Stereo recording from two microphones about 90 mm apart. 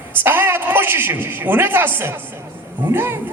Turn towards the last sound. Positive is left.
turn(degrees=-25)  # may be behind; listen again after turning